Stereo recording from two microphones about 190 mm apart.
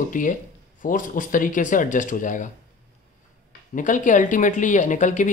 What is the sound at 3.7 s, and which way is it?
Speech, 40° left (ahead or behind).